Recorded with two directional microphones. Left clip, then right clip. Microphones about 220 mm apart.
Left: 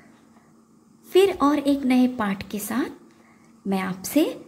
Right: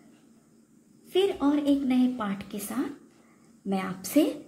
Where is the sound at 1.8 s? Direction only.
20° left (ahead or behind).